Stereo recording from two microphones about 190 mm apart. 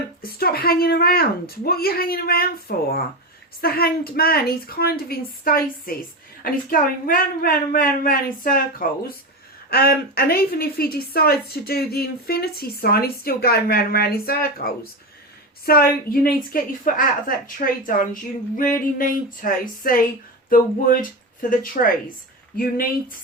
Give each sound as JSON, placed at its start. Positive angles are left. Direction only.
{"t": 0.2, "sound": "a woman's voice", "side_deg": 50}